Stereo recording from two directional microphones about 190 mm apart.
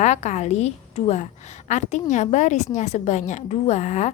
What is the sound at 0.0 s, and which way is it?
A woman's voice, 35° left (ahead or behind).